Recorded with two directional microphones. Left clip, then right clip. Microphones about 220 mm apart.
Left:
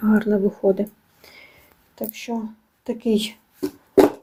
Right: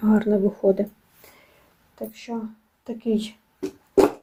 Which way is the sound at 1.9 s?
30° left (ahead or behind).